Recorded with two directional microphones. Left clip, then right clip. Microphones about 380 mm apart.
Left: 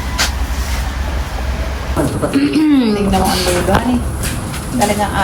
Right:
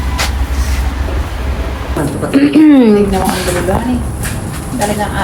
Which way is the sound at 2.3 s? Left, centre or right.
Centre.